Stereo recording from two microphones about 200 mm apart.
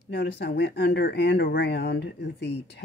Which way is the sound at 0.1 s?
60° left (ahead or behind).